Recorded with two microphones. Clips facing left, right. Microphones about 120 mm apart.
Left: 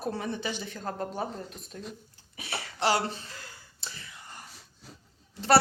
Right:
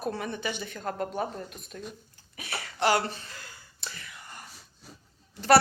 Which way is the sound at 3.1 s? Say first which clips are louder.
Left 1 dB; 25° left (ahead or behind).